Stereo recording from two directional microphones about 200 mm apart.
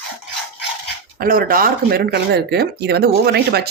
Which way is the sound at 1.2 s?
45° right (ahead or behind).